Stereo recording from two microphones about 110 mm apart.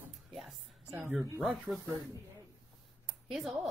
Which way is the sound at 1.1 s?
30° right (ahead or behind).